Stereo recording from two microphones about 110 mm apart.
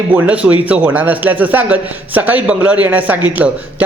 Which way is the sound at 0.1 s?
15° right (ahead or behind).